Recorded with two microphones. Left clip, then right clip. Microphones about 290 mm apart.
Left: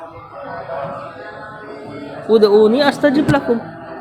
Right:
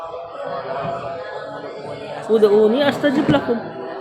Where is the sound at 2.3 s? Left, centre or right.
Left.